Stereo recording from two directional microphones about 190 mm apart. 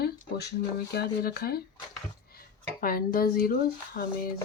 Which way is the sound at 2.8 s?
50° left (ahead or behind).